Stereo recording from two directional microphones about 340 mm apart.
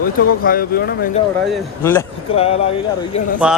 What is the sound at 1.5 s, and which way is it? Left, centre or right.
Speech, centre.